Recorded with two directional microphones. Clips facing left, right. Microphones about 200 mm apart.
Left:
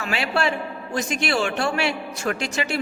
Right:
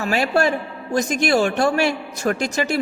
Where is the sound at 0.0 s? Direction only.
40° right (ahead or behind).